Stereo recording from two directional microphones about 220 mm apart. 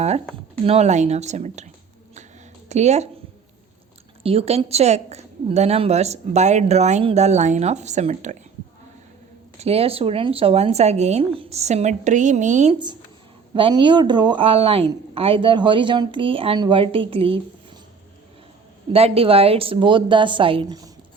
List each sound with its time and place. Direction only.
0.6 s a woman's voice: 30° right (ahead or behind)
4.2 s speech: 25° right (ahead or behind)
9.6 s speech: 25° right (ahead or behind)
13.5 s speech: 25° right (ahead or behind)
18.9 s speech: 25° right (ahead or behind)